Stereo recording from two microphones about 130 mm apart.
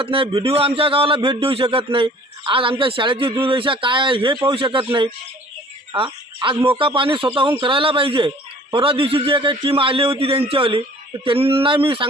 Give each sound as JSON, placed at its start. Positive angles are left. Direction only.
{"t": 0.0, "sound": "a man's voice", "side_deg": -45}
{"t": 5.9, "sound": "frog", "side_deg": -40}
{"t": 6.7, "sound": "a man's voice", "side_deg": -40}